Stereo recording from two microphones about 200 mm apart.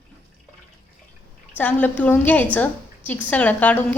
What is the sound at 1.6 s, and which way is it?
A woman's voice, 10° left (ahead or behind).